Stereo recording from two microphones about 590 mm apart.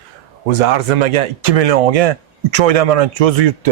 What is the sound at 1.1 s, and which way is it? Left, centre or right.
Speech, right.